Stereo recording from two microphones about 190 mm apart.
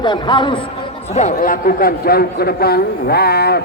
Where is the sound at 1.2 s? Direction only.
45° left (ahead or behind).